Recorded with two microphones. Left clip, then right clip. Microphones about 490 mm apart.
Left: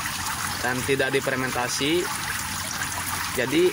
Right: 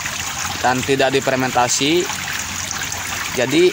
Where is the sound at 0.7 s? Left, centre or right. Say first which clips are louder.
Right 8 dB; left.